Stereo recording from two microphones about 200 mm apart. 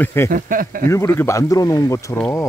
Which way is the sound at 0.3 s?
45° right (ahead or behind).